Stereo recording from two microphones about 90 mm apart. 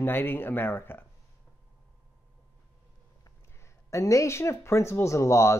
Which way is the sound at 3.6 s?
35° left (ahead or behind).